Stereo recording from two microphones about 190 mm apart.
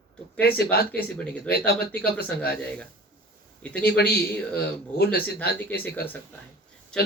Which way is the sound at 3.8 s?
55° left (ahead or behind).